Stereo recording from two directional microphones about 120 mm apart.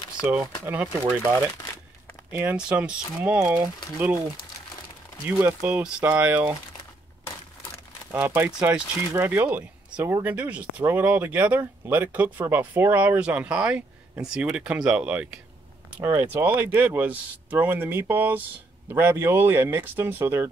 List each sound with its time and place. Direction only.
0.4 s speech: 15° right (ahead or behind)
2.3 s speech: 10° right (ahead or behind)
5.2 s speech: 20° right (ahead or behind)
5.6 s speech: 10° right (ahead or behind)
8.1 s speech: 15° right (ahead or behind)